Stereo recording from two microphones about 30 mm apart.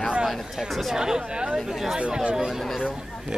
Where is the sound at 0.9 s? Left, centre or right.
Right.